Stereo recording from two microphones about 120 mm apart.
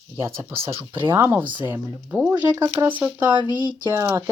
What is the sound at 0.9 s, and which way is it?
Speech, 40° right (ahead or behind).